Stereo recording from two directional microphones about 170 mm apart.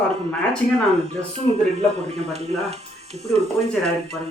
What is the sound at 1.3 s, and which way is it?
Speech, 40° right (ahead or behind).